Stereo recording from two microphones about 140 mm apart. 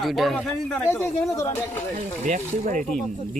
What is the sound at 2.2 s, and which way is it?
Speech, 70° right (ahead or behind).